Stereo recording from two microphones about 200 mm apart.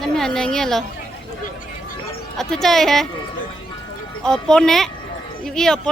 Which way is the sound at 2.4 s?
Centre (ahead or behind).